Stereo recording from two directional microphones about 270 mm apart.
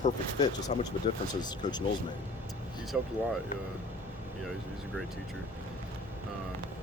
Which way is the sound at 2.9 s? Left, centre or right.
Centre.